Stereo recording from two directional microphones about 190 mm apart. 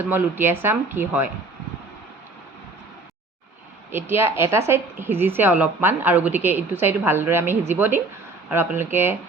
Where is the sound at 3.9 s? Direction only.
10° right (ahead or behind).